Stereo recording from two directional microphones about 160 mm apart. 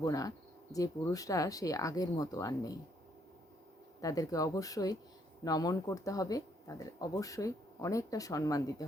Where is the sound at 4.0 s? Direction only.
20° left (ahead or behind).